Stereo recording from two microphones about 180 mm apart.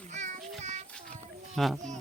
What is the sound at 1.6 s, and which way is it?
Speech, centre (ahead or behind).